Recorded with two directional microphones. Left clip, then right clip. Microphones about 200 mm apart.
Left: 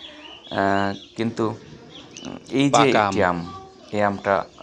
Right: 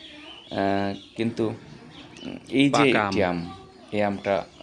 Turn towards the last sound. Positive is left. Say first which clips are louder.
# left 4 dB
turn(degrees=0)  # may be behind; listen again after turning